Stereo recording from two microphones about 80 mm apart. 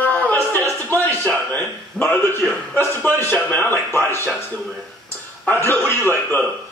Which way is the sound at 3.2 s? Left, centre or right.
Left.